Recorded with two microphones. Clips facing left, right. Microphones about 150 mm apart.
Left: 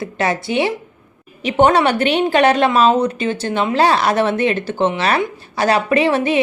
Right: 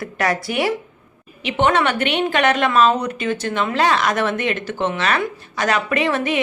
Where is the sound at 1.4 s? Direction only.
40° left (ahead or behind).